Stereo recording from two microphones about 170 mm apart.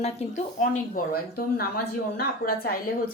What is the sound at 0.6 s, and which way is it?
Speech, 55° left (ahead or behind).